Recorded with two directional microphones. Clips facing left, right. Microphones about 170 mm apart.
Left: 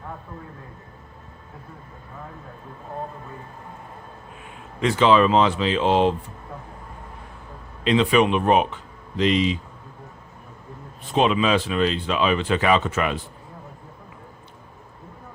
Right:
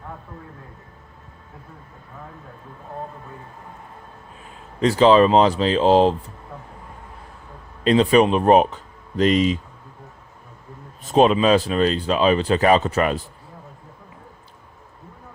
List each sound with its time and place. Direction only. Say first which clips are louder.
4.8 s speech: right 3 dB; 35° right (ahead or behind)
7.9 s speech: right 3 dB; 40° right (ahead or behind)
11.0 s speech: right 4 dB; 40° right (ahead or behind)